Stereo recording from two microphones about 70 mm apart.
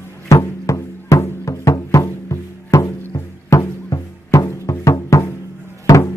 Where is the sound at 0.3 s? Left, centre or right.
Left.